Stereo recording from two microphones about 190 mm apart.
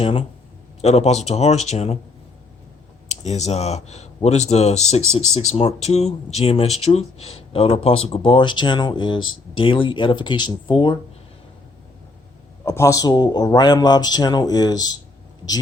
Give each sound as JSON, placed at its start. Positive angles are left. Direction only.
{"t": 0.0, "sound": "a man's voice", "side_deg": 30}
{"t": 3.1, "sound": "a man's voice", "side_deg": 35}
{"t": 12.6, "sound": "a man's voice", "side_deg": 15}